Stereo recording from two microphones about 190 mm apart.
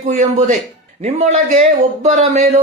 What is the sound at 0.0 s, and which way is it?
Speech, 40° right (ahead or behind).